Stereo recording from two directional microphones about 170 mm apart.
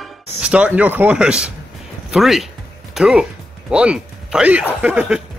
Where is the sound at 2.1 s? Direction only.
Centre (ahead or behind).